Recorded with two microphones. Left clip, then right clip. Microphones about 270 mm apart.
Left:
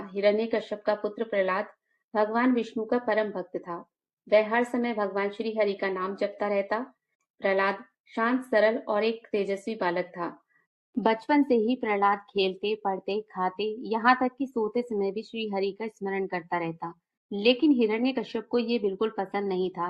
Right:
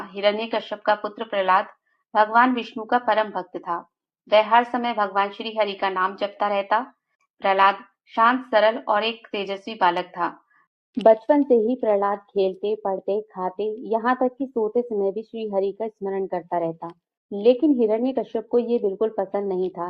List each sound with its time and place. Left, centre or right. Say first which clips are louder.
0.2 s speech: right 2 dB; left